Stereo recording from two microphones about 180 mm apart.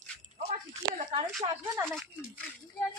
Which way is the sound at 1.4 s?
20° right (ahead or behind).